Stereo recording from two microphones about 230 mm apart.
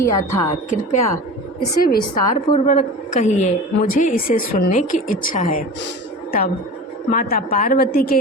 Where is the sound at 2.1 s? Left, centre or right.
Left.